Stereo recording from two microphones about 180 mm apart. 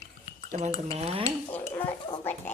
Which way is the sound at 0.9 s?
30° right (ahead or behind).